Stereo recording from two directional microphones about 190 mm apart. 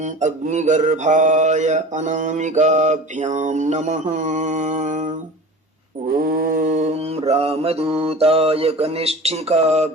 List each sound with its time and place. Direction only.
0.0 s mantra: 40° right (ahead or behind)